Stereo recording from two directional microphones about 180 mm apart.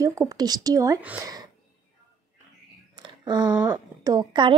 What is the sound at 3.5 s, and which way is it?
Speech, 10° right (ahead or behind).